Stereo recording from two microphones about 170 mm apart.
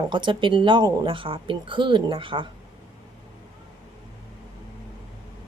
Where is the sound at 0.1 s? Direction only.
30° right (ahead or behind).